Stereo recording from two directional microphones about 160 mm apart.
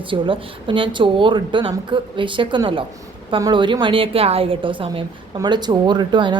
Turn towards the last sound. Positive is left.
turn(degrees=-30)  # may be behind; listen again after turning